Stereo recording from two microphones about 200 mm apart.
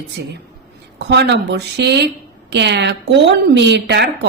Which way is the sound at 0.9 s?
55° right (ahead or behind).